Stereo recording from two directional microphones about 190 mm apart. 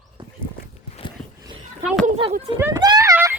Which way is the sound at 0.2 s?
25° right (ahead or behind).